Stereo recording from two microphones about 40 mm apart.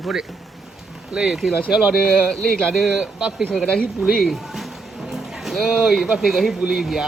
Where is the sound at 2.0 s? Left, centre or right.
Centre.